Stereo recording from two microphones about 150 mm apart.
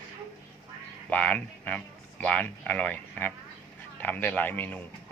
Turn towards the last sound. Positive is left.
turn(degrees=10)  # may be behind; listen again after turning